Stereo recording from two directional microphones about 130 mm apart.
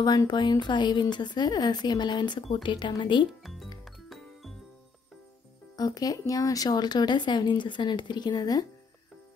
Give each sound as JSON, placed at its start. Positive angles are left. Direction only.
{"t": 0.0, "sound": "speech", "side_deg": 30}
{"t": 3.8, "sound": "music", "side_deg": 0}
{"t": 5.8, "sound": "speech", "side_deg": 30}